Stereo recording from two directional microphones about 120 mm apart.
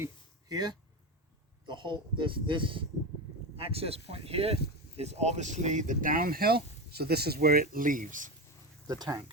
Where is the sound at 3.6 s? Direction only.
55° right (ahead or behind); by 5.9 s 90° right.